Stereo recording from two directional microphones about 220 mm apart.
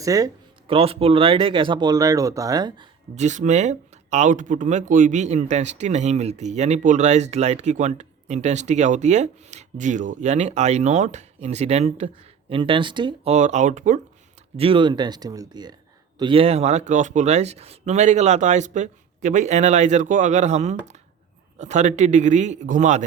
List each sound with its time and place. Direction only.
0.0 s speech: 15° right (ahead or behind)
0.7 s speech: 25° right (ahead or behind)
3.2 s speech: 35° right (ahead or behind)